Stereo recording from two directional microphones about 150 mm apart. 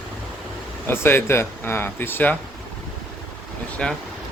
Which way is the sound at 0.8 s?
15° left (ahead or behind).